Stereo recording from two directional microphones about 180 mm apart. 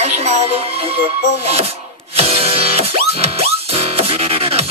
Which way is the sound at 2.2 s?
35° right (ahead or behind).